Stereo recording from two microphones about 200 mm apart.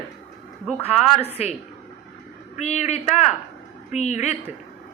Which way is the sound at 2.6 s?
35° left (ahead or behind).